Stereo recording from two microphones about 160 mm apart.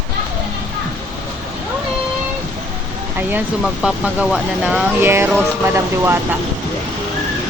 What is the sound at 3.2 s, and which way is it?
Speech, 10° right (ahead or behind).